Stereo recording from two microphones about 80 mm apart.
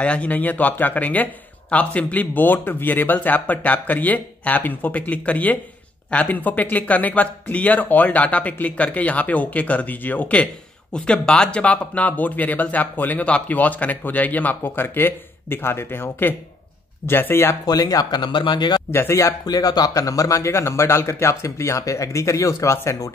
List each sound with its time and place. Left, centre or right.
0.0 s speech: centre
17.6 s speech: left
18.9 s speech: left
19.4 s speech: left